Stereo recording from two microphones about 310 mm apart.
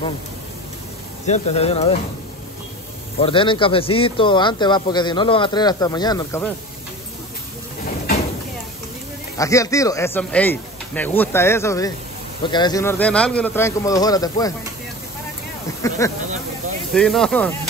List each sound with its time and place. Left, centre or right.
1.2 s speech: left
3.2 s speech: centre
9.4 s speech: centre
15.8 s speech: centre